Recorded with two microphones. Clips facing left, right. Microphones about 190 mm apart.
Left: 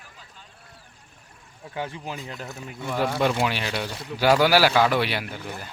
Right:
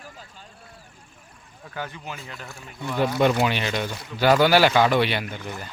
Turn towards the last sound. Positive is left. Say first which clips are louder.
# right 3 dB
turn(degrees=5)  # may be behind; listen again after turning